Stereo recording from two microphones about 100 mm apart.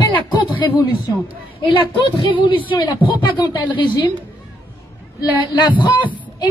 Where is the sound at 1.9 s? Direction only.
50° left (ahead or behind).